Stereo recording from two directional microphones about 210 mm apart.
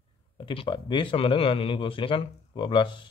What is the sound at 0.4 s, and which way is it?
Speech, 25° left (ahead or behind).